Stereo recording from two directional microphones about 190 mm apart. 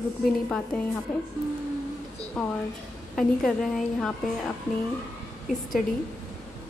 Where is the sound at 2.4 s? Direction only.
Centre (ahead or behind).